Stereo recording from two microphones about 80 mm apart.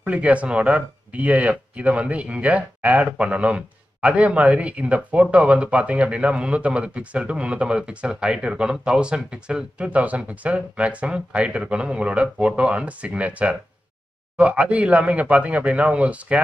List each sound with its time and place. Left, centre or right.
0.0 s speech: centre